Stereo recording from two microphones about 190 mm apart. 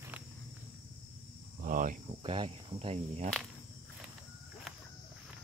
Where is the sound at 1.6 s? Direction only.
45° right (ahead or behind).